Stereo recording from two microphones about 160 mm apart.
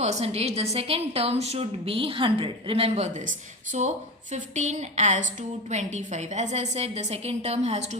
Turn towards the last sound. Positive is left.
turn(degrees=-45)  # may be behind; listen again after turning